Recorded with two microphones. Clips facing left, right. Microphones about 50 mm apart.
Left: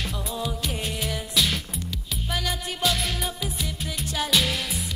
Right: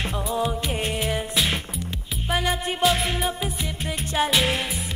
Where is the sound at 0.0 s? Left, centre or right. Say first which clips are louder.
Right 5 dB; right.